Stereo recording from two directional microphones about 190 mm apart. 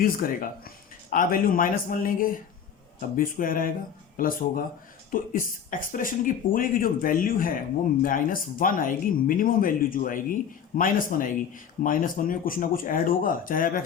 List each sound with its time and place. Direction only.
0.0 s speech: 50° left (ahead or behind)